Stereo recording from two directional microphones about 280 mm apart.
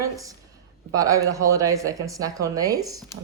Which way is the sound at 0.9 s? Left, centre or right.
Centre.